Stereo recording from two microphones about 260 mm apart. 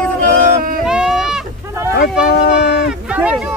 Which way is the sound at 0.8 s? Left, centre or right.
Centre.